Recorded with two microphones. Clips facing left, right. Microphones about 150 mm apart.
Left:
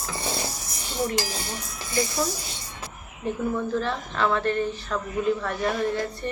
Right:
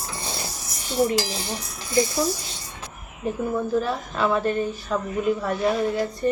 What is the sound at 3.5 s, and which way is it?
A woman's voice, 10° right (ahead or behind).